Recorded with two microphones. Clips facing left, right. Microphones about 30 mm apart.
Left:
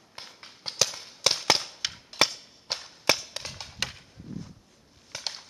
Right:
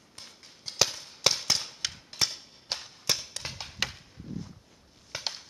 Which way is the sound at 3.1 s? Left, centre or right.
Left.